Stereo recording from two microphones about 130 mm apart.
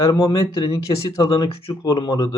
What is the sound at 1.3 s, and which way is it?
Speech, 40° left (ahead or behind).